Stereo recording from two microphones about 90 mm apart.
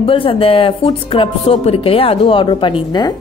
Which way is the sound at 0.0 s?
85° left.